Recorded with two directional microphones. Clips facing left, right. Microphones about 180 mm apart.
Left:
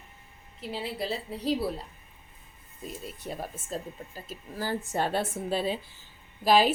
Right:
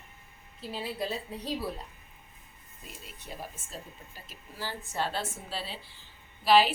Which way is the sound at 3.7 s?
45° left (ahead or behind).